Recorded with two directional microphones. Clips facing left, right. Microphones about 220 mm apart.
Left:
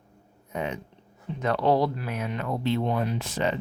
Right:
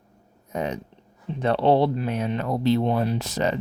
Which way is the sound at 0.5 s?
40° right (ahead or behind).